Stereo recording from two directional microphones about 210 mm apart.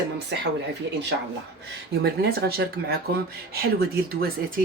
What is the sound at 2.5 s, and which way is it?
Speech, 45° right (ahead or behind).